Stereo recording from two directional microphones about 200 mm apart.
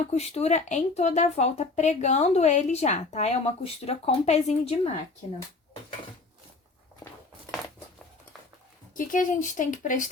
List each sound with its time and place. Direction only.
0.1 s speech: 35° left (ahead or behind)
9.0 s speech: 40° left (ahead or behind)